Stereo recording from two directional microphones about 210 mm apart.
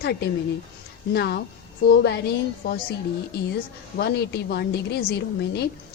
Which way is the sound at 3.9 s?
50° left (ahead or behind).